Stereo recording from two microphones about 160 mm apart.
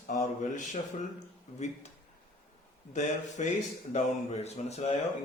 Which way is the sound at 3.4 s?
50° left (ahead or behind).